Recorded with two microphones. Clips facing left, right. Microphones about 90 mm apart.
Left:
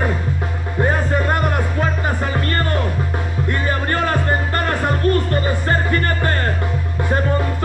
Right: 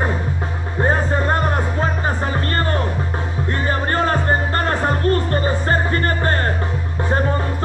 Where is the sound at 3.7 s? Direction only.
30° right (ahead or behind).